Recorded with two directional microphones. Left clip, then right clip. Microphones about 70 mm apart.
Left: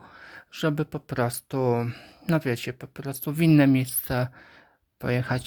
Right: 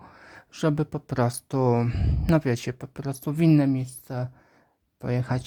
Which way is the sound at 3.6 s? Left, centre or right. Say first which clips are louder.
Left 4 dB; left.